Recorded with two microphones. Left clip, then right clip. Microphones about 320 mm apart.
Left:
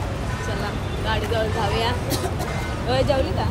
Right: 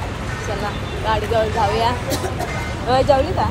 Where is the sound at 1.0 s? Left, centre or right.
Centre.